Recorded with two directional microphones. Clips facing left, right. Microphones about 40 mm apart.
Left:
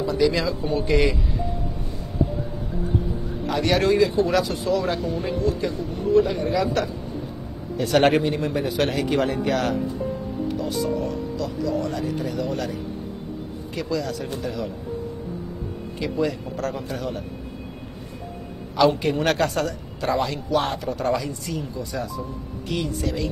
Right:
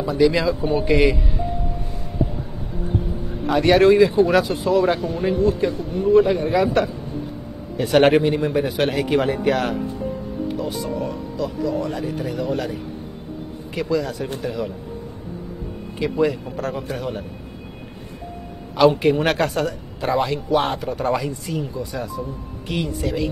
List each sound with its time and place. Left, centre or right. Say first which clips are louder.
0.0 s speech: right 3 dB; centre
3.4 s speech: right 6 dB; right
13.7 s speech: right 4 dB; centre
16.0 s speech: right 5 dB; centre
18.8 s speech: right 4 dB; right